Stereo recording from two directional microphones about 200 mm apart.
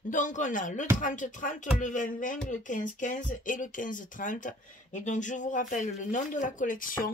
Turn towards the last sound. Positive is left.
turn(degrees=45)  # may be behind; listen again after turning